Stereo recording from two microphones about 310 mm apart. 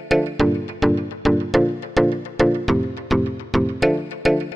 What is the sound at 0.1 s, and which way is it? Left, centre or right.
Music, centre.